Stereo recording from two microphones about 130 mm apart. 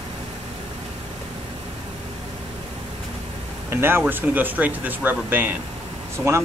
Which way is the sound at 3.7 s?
20° right (ahead or behind).